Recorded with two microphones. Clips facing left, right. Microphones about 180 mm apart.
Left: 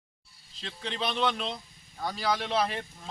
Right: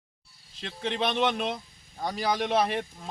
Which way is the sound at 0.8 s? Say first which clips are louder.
Right 5 dB; 55° right (ahead or behind).